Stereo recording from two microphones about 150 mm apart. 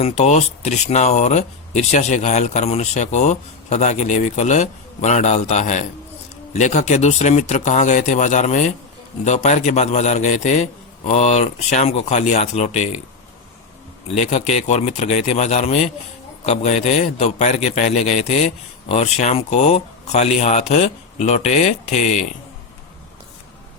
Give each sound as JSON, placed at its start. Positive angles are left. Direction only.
{"t": 0.0, "sound": "a man's voice", "side_deg": 50}
{"t": 14.1, "sound": "a man's voice", "side_deg": 50}